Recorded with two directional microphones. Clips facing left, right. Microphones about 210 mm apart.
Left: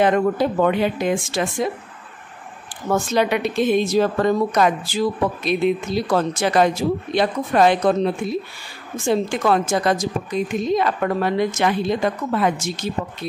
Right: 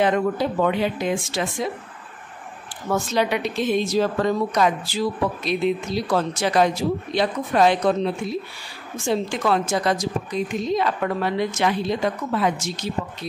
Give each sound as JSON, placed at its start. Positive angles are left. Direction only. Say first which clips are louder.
{"t": 0.0, "sound": "a woman's voice", "louder": "left 3 dB", "side_deg": 50}
{"t": 2.9, "sound": "a woman's voice", "louder": "left 3 dB", "side_deg": 50}